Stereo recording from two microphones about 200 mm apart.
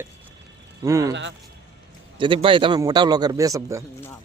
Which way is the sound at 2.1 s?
25° right (ahead or behind).